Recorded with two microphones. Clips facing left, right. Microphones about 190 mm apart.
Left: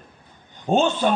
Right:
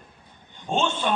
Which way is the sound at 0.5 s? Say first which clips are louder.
Left 6 dB; 40° left (ahead or behind).